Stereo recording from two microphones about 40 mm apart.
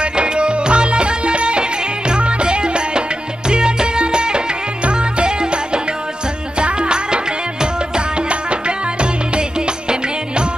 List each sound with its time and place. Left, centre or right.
0.0 s music: right